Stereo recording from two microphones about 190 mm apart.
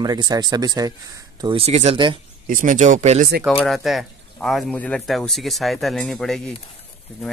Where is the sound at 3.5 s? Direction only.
Centre (ahead or behind).